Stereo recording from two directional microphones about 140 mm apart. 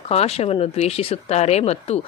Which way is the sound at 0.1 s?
45° left (ahead or behind).